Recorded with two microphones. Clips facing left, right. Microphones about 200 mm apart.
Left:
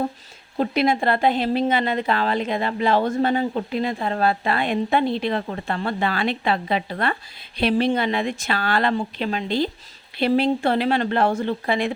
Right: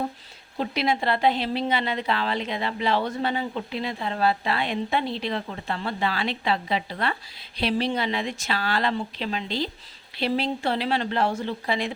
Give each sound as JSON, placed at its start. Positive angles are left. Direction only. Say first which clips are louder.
{"t": 0.5, "sound": "a woman's voice", "louder": "left 5 dB", "side_deg": 50}